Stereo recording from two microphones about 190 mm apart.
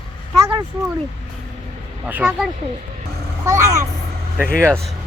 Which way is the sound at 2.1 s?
5° right (ahead or behind).